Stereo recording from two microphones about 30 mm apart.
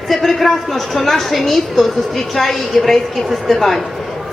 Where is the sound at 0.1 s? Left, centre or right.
Centre.